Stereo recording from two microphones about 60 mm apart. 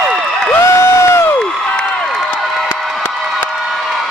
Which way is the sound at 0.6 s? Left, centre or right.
Left.